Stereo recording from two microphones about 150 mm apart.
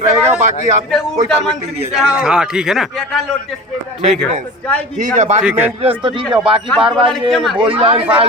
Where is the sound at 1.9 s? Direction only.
5° right (ahead or behind).